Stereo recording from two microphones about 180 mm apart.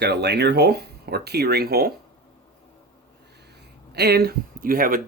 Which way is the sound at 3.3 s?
65° right (ahead or behind).